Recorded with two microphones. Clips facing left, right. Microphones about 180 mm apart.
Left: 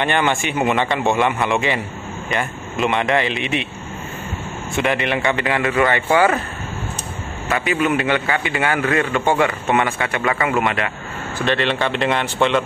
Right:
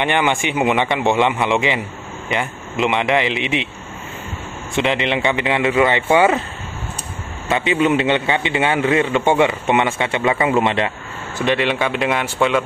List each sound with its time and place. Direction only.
0.0 s speech: 15° right (ahead or behind)
2.8 s speech: 20° right (ahead or behind)
4.7 s a man's voice: 20° right (ahead or behind)
7.4 s a man's voice: 20° right (ahead or behind)
11.3 s speech: 15° right (ahead or behind)